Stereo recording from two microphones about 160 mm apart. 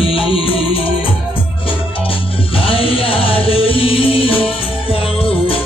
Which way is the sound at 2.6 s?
35° left (ahead or behind).